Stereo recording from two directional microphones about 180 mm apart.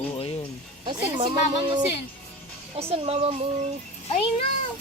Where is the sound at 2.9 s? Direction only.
30° right (ahead or behind).